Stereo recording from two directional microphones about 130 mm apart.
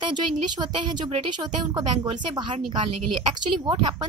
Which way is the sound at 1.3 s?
35° right (ahead or behind).